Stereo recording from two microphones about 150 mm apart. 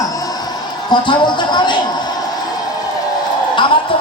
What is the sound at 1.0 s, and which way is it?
Speech, 30° left (ahead or behind).